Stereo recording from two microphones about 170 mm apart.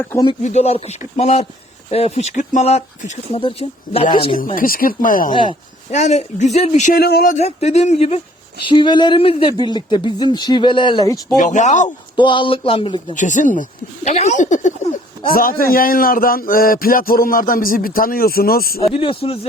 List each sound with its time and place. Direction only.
0.4 s speech: 40° left (ahead or behind)
4.4 s speech: 55° left (ahead or behind)
5.3 s speech: 30° left (ahead or behind)
5.9 s speech: 40° left (ahead or behind)
6.9 s speech: 65° left (ahead or behind)
7.3 s speech: 40° left (ahead or behind)
8.6 s speech: 25° left (ahead or behind)
11.3 s speech: 45° left (ahead or behind)
12.1 s speech: 30° left (ahead or behind)
13.1 s speech: 45° left (ahead or behind)
18.9 s speech: 35° left (ahead or behind)